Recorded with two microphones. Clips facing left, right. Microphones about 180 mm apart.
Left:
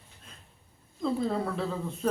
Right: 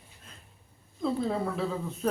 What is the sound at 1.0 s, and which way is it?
Speech, 5° right (ahead or behind).